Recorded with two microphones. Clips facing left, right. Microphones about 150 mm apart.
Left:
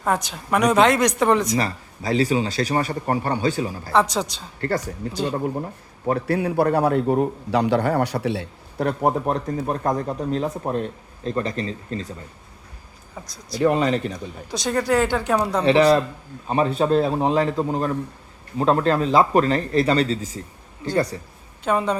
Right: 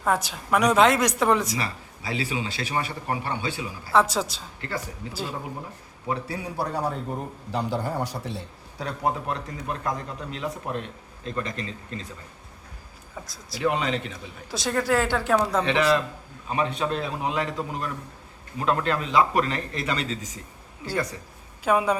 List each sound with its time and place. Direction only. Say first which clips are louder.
0.0 s a woman's voice: left 2 dB; centre (ahead or behind)
1.5 s a man's voice: left 7 dB; 40° left (ahead or behind)
3.9 s a woman's voice: left 1 dB; 5° right (ahead or behind)
6.1 s a man's voice: left 9 dB; 60° left (ahead or behind); by 12.0 s 35° left (ahead or behind)
13.2 s a woman's voice: left 7 dB; centre (ahead or behind)
13.6 s a man's voice: left 6 dB; 40° left (ahead or behind)
14.5 s a woman's voice: left 3 dB; centre (ahead or behind)
15.6 s a man's voice: left 6 dB; 35° left (ahead or behind)
21.6 s a woman's voice: left 1 dB; 5° right (ahead or behind)